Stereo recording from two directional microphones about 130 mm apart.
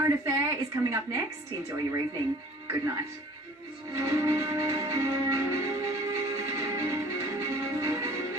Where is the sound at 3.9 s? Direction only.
20° right (ahead or behind).